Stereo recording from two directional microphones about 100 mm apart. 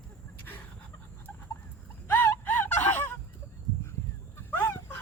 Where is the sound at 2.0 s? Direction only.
20° left (ahead or behind).